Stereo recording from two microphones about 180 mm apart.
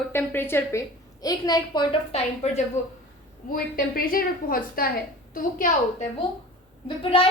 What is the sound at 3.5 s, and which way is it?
A woman's voice, 50° left (ahead or behind).